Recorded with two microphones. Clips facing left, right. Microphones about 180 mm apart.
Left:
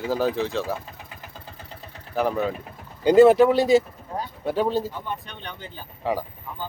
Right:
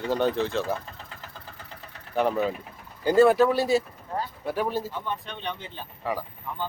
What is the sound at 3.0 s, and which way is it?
Speech, 20° left (ahead or behind).